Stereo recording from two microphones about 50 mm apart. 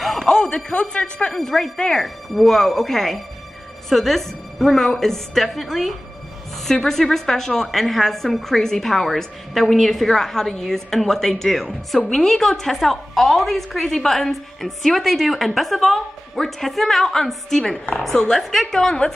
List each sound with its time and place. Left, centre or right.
0.0 s a sound: centre
0.3 s speech: centre
1.3 s a woman's voice: centre